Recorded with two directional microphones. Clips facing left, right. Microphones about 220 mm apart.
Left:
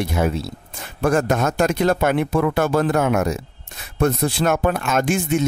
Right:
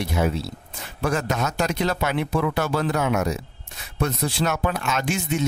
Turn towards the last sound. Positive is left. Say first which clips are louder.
# left 6 dB
turn(degrees=50)  # may be behind; listen again after turning